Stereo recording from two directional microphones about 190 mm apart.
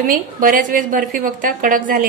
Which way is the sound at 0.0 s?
45° right (ahead or behind).